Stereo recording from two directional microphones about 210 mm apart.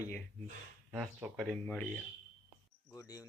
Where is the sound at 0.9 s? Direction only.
Centre (ahead or behind).